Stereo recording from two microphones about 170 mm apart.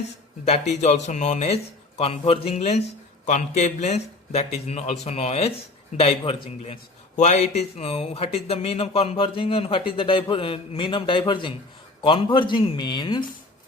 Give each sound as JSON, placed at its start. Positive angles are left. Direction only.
{"t": 0.4, "sound": "speech", "side_deg": 40}